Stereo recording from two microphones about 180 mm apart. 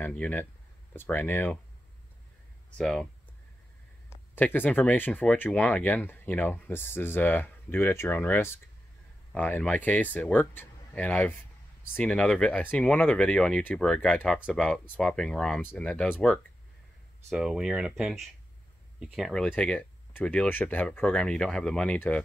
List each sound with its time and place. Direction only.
0.0 s speech: 10° left (ahead or behind)
2.8 s speech: centre (ahead or behind)
4.1 s speech: 10° left (ahead or behind)
17.3 s speech: 5° right (ahead or behind)